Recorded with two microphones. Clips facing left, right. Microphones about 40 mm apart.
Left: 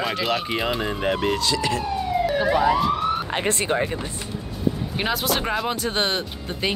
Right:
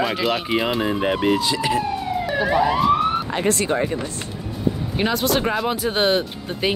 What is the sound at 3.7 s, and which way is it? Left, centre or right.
Speech, centre.